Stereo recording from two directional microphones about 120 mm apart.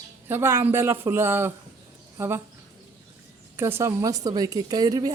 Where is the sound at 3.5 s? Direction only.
20° right (ahead or behind).